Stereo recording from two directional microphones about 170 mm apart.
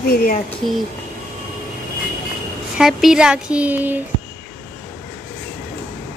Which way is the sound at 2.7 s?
5° right (ahead or behind).